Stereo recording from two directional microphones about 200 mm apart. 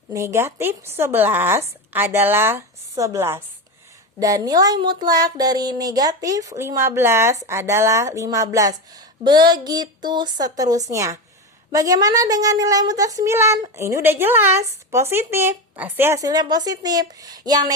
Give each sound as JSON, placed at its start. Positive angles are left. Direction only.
{"t": 0.1, "sound": "speech", "side_deg": -15}